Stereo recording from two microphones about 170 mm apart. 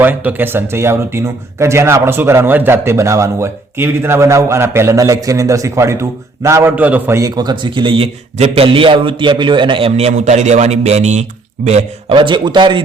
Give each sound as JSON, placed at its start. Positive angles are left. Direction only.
{"t": 0.0, "sound": "speech", "side_deg": -10}
{"t": 12.1, "sound": "speech", "side_deg": -30}